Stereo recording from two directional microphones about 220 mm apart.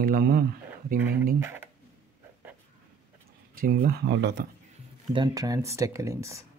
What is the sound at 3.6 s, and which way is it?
Speech, 40° right (ahead or behind).